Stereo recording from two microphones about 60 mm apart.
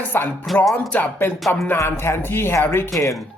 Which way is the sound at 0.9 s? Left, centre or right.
Left.